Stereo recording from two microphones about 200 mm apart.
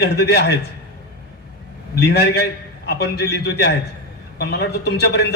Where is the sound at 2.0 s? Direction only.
55° left (ahead or behind).